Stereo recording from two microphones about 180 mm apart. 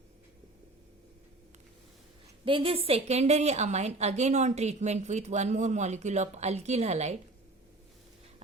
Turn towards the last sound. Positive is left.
turn(degrees=-40)  # may be behind; listen again after turning